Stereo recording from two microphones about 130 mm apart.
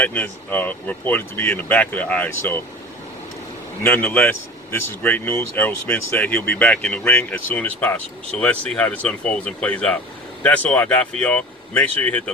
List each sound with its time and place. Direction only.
0.0 s speech: 10° left (ahead or behind)
3.8 s speech: 15° left (ahead or behind)